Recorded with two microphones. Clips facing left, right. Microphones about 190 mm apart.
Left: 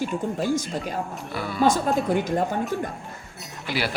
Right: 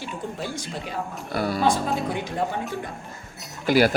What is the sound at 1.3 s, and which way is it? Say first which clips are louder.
Speech: right 4 dB; 40° right (ahead or behind).